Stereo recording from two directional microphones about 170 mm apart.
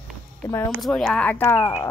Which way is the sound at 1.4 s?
20° left (ahead or behind).